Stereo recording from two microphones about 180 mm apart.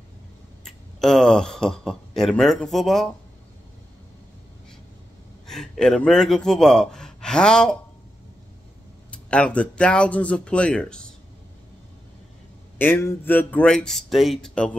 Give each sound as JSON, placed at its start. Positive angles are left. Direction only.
{"t": 1.0, "sound": "speech", "side_deg": 5}
{"t": 5.5, "sound": "speech", "side_deg": 0}
{"t": 9.1, "sound": "speech", "side_deg": 5}
{"t": 12.7, "sound": "speech", "side_deg": 10}